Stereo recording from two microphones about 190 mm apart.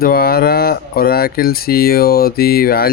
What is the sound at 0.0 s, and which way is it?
Speech, 50° left (ahead or behind).